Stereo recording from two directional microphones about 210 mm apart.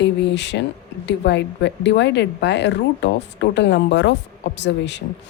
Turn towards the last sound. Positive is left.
turn(degrees=55)  # may be behind; listen again after turning